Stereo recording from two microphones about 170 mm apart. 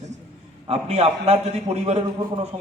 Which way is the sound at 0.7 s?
35° right (ahead or behind).